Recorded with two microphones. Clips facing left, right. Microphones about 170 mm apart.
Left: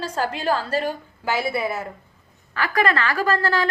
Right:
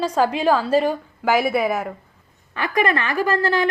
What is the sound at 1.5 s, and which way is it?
Speech, 90° right.